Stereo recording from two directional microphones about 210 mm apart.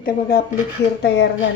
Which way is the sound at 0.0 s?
45° left (ahead or behind).